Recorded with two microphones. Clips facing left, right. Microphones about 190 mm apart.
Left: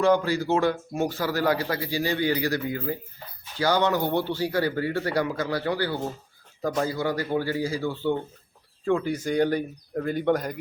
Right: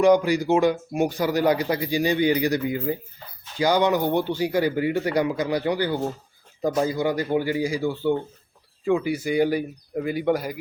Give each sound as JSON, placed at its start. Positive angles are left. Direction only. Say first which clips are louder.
{"t": 0.0, "sound": "speech", "louder": "right 4 dB", "side_deg": -15}